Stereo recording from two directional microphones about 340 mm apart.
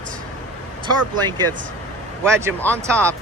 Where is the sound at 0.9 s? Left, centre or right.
Centre.